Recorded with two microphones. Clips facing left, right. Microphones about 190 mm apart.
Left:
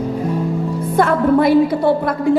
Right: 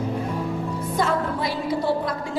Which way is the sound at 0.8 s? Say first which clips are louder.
Left 8 dB; 60° left (ahead or behind).